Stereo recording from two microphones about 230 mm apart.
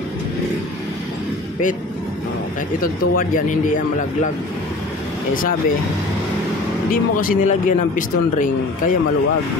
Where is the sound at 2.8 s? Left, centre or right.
Left.